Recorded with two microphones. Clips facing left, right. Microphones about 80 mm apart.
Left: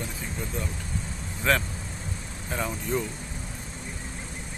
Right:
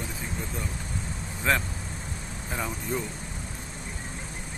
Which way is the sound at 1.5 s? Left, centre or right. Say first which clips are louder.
Left 1 dB; centre.